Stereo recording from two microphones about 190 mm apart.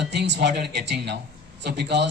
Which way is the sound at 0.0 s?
65° right (ahead or behind).